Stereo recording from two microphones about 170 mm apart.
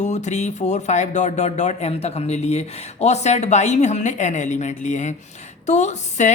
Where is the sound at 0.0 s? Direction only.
45° left (ahead or behind).